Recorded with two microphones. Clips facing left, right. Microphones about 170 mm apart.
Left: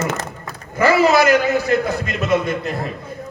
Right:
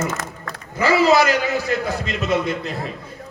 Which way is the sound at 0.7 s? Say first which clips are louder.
Left 1 dB; 50° left (ahead or behind).